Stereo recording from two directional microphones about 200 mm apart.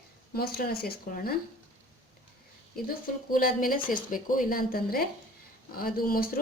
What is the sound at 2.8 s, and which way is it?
Speech, 45° left (ahead or behind).